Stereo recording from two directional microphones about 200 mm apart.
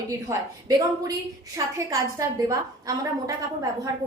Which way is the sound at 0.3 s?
15° right (ahead or behind).